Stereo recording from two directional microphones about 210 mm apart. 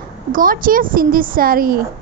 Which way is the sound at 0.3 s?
40° right (ahead or behind).